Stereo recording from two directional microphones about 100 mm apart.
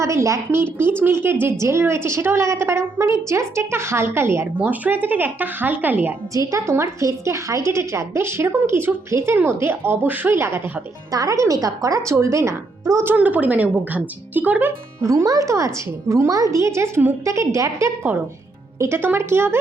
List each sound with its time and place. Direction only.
0.0 s a woman's voice: 30° right (ahead or behind)
6.3 s a woman's voice: 30° right (ahead or behind)
11.1 s speech: 35° right (ahead or behind)
13.1 s a woman's voice: 15° right (ahead or behind)
15.0 s a woman's voice: 35° right (ahead or behind)